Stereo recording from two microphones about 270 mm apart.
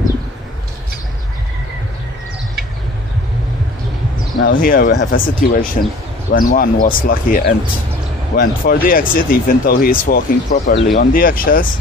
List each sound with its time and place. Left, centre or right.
4.4 s speech: left